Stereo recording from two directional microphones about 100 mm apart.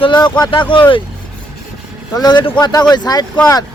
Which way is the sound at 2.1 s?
45° left (ahead or behind).